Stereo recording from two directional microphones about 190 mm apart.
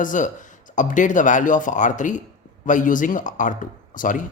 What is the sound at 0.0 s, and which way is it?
Speech, 45° left (ahead or behind).